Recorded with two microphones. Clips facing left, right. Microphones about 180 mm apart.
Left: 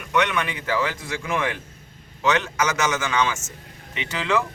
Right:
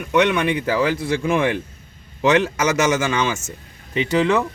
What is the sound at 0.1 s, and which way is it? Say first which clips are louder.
Speech: right 6 dB; 30° right (ahead or behind).